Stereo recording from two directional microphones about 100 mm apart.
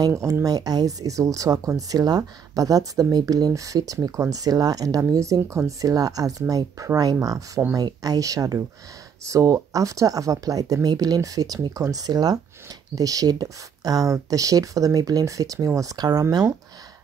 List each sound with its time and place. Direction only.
0.2 s speech: 35° right (ahead or behind)